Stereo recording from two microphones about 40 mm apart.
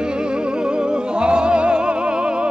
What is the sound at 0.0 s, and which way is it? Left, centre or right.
Music, right.